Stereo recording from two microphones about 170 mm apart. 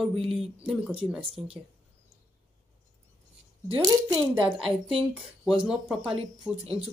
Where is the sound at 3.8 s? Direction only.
25° right (ahead or behind).